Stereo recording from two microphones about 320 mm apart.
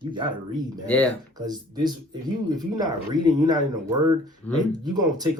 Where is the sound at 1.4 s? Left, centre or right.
Centre.